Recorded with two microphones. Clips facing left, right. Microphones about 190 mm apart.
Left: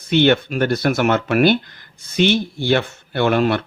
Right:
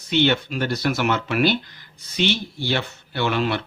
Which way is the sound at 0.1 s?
55° left (ahead or behind).